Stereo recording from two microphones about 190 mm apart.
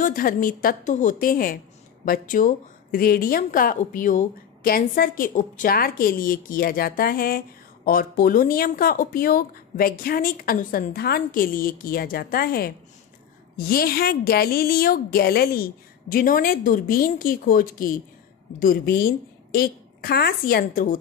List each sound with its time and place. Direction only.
0.0 s a woman's voice: 45° left (ahead or behind)